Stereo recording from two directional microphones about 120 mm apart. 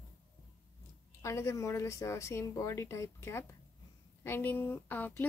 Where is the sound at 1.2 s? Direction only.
25° left (ahead or behind).